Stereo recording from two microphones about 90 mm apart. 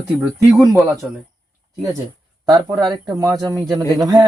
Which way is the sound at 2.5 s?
50° right (ahead or behind).